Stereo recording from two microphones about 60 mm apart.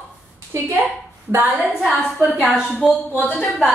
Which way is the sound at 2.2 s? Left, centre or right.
Centre.